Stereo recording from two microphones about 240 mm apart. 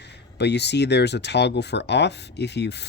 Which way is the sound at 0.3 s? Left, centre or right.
Left.